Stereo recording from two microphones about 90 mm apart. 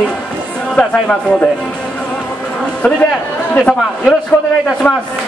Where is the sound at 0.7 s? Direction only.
15° left (ahead or behind).